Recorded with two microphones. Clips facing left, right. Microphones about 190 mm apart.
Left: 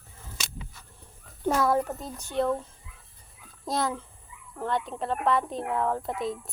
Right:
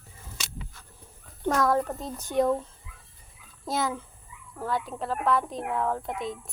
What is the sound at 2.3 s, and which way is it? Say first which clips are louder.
Speech: right 3 dB; 15° right (ahead or behind).